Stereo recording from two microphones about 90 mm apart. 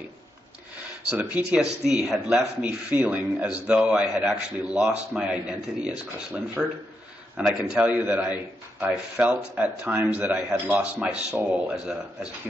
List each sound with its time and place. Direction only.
1.1 s a man's voice: 15° right (ahead or behind)
7.8 s a man's voice: 20° right (ahead or behind)